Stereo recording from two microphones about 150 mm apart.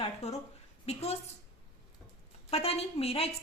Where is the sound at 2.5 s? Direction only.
45° left (ahead or behind).